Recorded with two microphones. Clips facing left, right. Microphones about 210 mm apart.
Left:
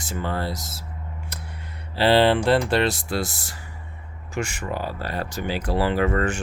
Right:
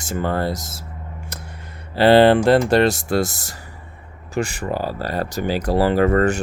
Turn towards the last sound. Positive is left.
turn(degrees=-40)  # may be behind; listen again after turning